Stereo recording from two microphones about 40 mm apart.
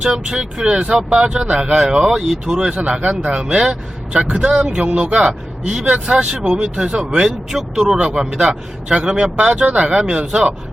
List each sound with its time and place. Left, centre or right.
0.0 s a man's voice: centre
2.6 s speech: right
3.2 s a man's voice: centre
9.4 s speech: right